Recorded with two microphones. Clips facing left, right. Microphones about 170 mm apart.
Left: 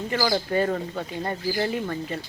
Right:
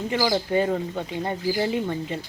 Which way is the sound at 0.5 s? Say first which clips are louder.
Right 1 dB; 15° right (ahead or behind).